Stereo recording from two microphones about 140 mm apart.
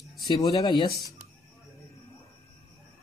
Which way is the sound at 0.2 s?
30° left (ahead or behind).